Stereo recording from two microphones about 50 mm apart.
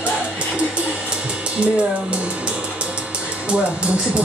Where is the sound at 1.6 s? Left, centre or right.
Right.